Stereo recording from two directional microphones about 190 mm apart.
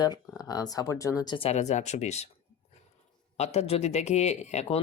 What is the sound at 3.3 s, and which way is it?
Speech, 35° left (ahead or behind).